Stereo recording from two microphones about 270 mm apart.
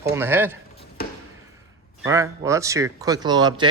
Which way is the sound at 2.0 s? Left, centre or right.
Centre.